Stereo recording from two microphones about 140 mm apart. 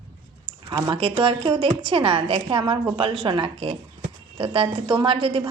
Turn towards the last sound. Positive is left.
turn(degrees=-40)  # may be behind; listen again after turning